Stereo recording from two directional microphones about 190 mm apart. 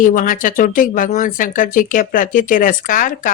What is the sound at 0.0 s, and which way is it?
Speech, 45° left (ahead or behind).